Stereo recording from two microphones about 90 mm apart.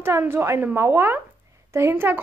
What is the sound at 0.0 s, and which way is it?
A woman's voice, 30° right (ahead or behind).